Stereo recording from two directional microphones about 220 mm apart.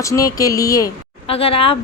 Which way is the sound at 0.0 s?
15° left (ahead or behind).